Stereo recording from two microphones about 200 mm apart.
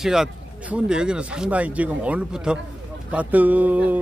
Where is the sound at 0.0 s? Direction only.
Centre (ahead or behind).